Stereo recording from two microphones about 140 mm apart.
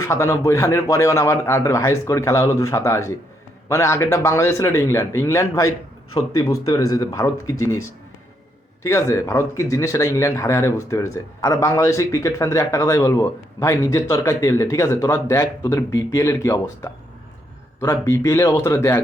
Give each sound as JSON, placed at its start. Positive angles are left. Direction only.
{"t": 0.0, "sound": "speech", "side_deg": 20}